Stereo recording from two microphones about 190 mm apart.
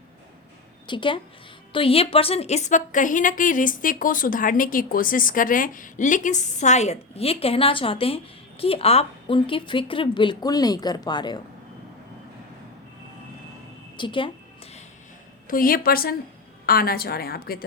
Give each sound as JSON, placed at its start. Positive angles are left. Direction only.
{"t": 0.9, "sound": "a woman's voice", "side_deg": 25}
{"t": 13.9, "sound": "a sound", "side_deg": 25}
{"t": 15.4, "sound": "a woman's voice", "side_deg": 45}